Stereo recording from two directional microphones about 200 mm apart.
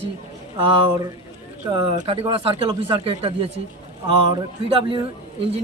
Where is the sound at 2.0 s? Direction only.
30° right (ahead or behind).